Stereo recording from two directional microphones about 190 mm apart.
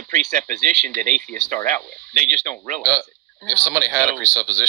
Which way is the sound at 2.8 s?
15° right (ahead or behind).